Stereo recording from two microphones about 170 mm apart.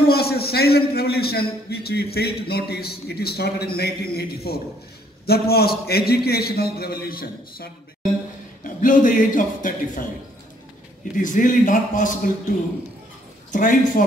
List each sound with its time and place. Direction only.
0.1 s a man's voice: 65° left (ahead or behind)
11.1 s a man's voice: 50° left (ahead or behind)
13.5 s a man's voice: 50° left (ahead or behind)